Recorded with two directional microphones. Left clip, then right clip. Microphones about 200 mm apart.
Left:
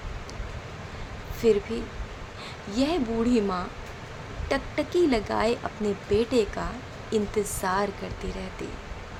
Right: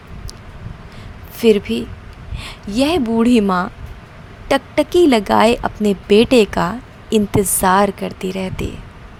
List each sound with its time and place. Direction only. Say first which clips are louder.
1.4 s a woman's voice: right 9 dB; 45° right (ahead or behind)